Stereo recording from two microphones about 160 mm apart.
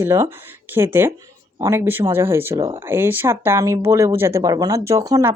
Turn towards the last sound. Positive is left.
turn(degrees=-20)  # may be behind; listen again after turning